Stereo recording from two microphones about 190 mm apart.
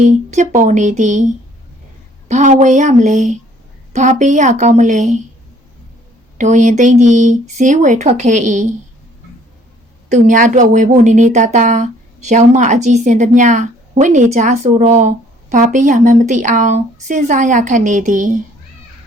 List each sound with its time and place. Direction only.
0.0 s a woman's voice: 40° right (ahead or behind)
6.3 s a woman's voice: 40° right (ahead or behind)
10.1 s a woman's voice: 45° right (ahead or behind)